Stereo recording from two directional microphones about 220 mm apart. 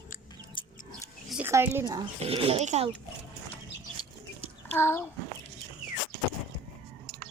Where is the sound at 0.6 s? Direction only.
20° left (ahead or behind).